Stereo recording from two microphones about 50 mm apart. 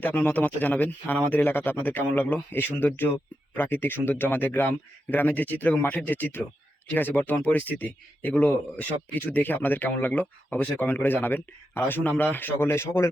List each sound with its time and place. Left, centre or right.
0.0 s speech: left
12.3 s speech: left